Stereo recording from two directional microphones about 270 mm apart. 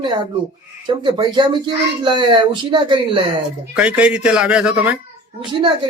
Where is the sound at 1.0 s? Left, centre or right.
Centre.